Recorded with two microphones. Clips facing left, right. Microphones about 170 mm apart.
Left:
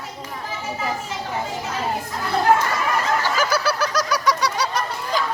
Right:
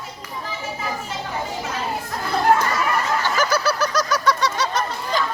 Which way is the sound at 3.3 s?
5° left (ahead or behind).